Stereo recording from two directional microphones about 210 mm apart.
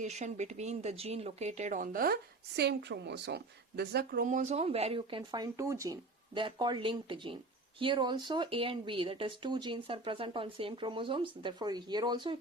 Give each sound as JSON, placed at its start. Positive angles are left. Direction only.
{"t": 0.0, "sound": "speech", "side_deg": -35}
{"t": 2.6, "sound": "a woman's voice", "side_deg": -55}